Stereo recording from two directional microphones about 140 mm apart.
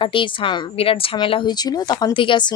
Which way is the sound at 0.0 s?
35° left (ahead or behind).